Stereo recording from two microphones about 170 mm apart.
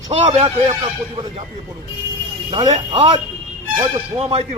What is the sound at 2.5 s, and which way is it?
Speech, 30° right (ahead or behind).